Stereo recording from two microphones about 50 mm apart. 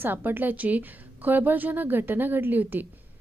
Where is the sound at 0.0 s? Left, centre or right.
Right.